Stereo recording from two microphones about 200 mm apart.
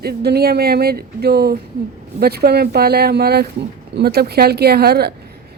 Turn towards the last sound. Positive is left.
turn(degrees=-50)  # may be behind; listen again after turning